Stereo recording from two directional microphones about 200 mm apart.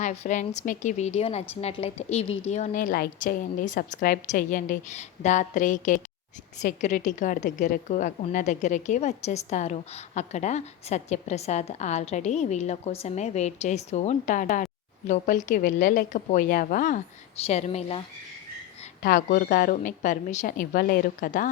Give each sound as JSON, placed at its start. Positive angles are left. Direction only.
{"t": 0.0, "sound": "a woman's voice", "side_deg": 35}
{"t": 19.0, "sound": "a woman's voice", "side_deg": 45}